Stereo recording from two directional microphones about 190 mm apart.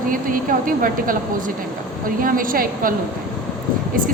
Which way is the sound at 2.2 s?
45° right (ahead or behind).